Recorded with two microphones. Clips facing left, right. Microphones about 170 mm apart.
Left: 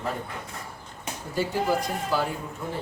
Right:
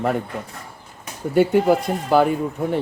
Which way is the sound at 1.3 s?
60° right (ahead or behind).